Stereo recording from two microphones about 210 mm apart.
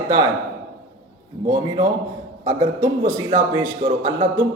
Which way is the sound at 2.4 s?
15° right (ahead or behind).